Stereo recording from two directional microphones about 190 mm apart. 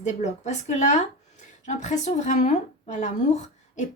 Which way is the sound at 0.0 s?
40° left (ahead or behind).